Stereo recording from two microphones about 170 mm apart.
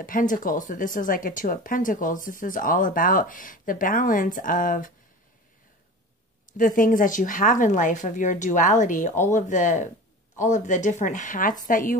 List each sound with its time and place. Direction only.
0.0 s speech: 55° left (ahead or behind)
6.5 s speech: 50° left (ahead or behind)